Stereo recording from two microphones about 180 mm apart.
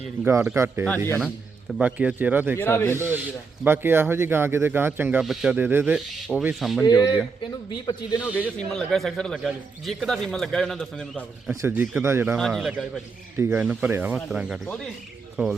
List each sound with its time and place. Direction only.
0.3 s speech: 15° right (ahead or behind)
2.6 s speech: 10° left (ahead or behind)
3.6 s speech: 10° right (ahead or behind)
6.8 s a man's voice: 20° left (ahead or behind)
8.4 s speech: 5° left (ahead or behind)
11.6 s speech: 10° right (ahead or behind)
12.4 s speech: centre (ahead or behind)
13.3 s speech: 10° right (ahead or behind)